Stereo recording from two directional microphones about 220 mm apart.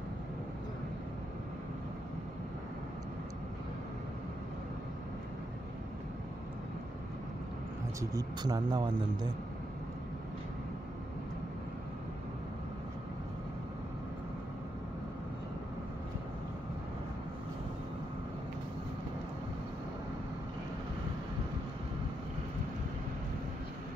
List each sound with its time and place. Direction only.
8.0 s speech: 15° right (ahead or behind)